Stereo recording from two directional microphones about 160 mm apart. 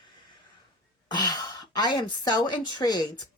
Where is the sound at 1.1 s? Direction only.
25° left (ahead or behind).